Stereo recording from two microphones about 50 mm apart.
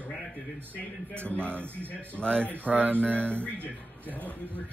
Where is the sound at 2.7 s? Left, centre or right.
Right.